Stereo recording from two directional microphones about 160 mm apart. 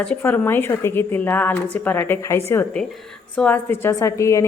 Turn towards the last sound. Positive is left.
turn(degrees=20)  # may be behind; listen again after turning